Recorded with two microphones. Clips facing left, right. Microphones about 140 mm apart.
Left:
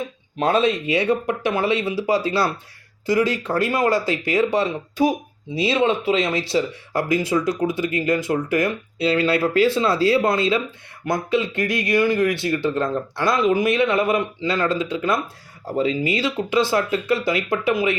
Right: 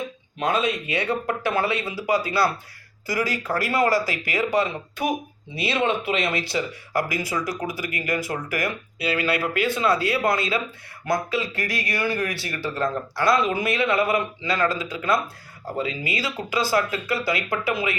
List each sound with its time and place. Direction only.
0.3 s speech: 35° left (ahead or behind)